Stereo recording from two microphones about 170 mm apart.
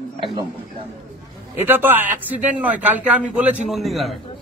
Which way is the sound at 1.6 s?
10° right (ahead or behind).